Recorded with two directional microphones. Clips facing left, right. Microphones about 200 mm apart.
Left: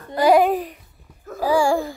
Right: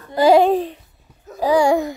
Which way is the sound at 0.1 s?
30° right (ahead or behind).